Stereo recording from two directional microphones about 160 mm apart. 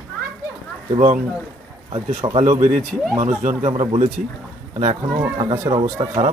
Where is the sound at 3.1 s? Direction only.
40° right (ahead or behind).